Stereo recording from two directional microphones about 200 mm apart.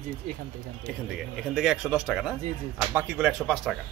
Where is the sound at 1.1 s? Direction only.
Centre (ahead or behind).